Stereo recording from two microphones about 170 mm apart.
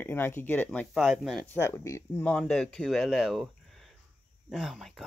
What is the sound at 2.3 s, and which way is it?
Speech, 5° left (ahead or behind).